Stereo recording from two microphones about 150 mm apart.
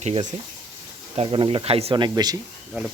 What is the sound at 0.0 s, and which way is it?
Speech, 50° right (ahead or behind).